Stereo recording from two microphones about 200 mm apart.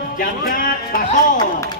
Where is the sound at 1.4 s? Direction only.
20° left (ahead or behind).